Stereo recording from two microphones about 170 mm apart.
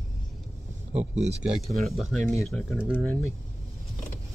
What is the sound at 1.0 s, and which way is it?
Speech, 40° right (ahead or behind).